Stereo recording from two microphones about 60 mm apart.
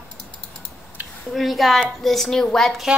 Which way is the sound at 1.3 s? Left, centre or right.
Centre.